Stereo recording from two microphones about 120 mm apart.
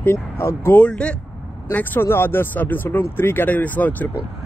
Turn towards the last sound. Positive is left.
turn(degrees=15)  # may be behind; listen again after turning